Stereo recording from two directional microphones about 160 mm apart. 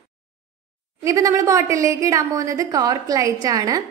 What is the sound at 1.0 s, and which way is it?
A woman's voice, 20° right (ahead or behind).